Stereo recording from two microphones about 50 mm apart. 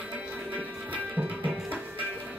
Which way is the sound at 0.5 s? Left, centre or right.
Right.